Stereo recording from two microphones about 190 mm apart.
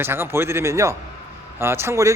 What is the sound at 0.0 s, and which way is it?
A man's voice, 10° right (ahead or behind).